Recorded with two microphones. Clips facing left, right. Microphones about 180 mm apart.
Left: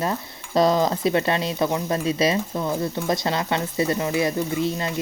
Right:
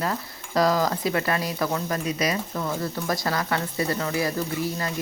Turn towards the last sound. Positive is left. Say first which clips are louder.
# left 4 dB
turn(degrees=20)  # may be behind; listen again after turning